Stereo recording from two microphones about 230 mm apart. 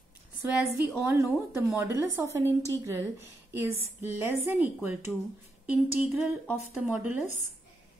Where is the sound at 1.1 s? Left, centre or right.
Centre.